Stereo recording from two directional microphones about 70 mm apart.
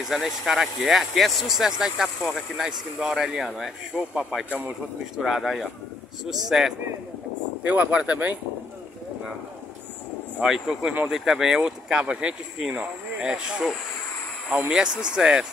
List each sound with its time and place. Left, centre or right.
0.0 s speech: centre
3.9 s speech: centre
7.6 s speech: right
10.4 s speech: centre